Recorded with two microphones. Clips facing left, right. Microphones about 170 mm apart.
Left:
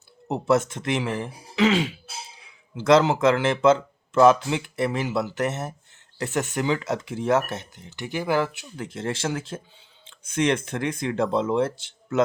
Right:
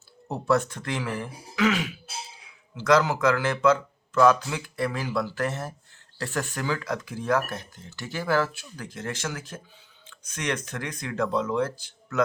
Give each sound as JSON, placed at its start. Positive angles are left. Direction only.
{"t": 0.3, "sound": "speech", "side_deg": 20}